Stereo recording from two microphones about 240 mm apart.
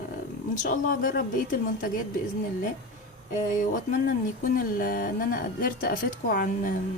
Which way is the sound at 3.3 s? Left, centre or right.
Left.